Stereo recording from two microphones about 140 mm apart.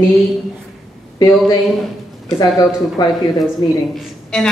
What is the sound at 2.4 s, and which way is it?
Speech, 30° left (ahead or behind).